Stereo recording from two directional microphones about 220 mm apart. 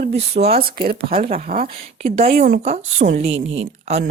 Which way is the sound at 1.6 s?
30° right (ahead or behind).